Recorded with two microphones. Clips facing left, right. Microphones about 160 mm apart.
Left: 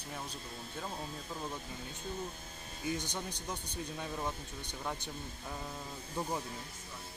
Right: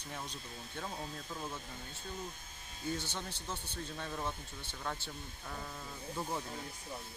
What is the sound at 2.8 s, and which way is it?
A man's voice, 15° left (ahead or behind).